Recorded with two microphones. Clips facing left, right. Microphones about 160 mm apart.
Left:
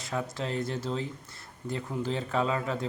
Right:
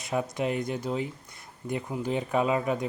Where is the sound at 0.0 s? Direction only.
15° right (ahead or behind).